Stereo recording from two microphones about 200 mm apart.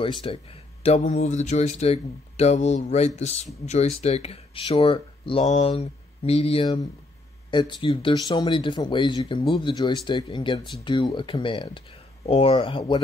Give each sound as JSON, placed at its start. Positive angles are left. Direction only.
{"t": 0.0, "sound": "speech", "side_deg": 25}